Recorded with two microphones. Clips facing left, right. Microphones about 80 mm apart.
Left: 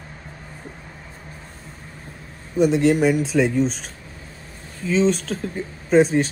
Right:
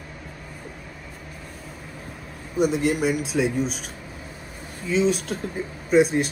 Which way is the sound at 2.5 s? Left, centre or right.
Right.